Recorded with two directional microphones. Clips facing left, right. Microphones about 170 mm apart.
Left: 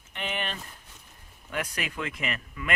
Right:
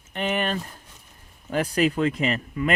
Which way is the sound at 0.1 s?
40° right (ahead or behind).